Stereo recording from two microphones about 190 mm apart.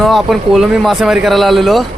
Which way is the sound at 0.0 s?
Centre (ahead or behind).